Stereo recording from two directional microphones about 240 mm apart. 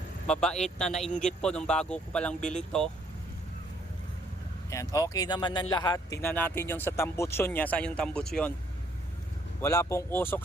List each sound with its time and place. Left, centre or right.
0.3 s speech: centre
4.7 s speech: centre
9.6 s speech: centre